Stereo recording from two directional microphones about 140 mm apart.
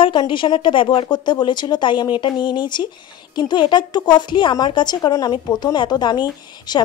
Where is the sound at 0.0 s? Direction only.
35° left (ahead or behind).